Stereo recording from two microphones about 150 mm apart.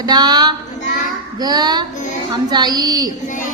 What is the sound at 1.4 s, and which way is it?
Speech, 25° right (ahead or behind).